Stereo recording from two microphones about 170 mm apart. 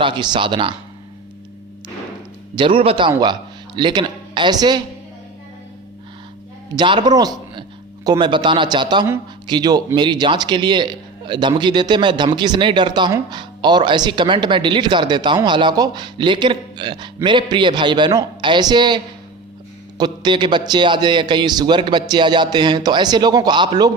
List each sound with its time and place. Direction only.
0.0 s a man's voice: 25° right (ahead or behind)
2.6 s a man's voice: 30° right (ahead or behind)
6.7 s a man's voice: 25° right (ahead or behind)